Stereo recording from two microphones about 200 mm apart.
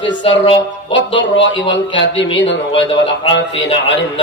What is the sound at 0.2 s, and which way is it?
Speech, 25° left (ahead or behind).